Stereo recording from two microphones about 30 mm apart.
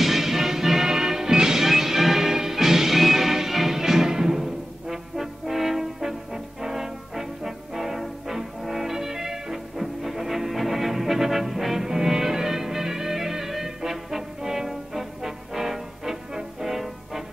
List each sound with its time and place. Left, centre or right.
0.0 s music: centre